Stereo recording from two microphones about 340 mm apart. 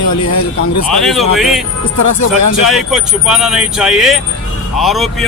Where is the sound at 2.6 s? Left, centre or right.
Centre.